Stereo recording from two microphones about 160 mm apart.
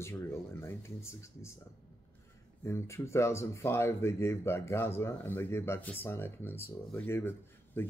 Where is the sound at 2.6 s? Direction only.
15° left (ahead or behind).